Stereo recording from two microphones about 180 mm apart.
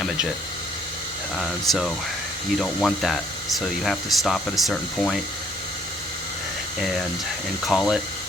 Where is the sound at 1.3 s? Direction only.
Centre (ahead or behind).